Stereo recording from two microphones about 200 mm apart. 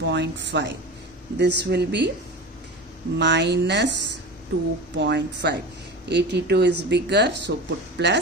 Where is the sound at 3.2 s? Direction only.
60° right (ahead or behind).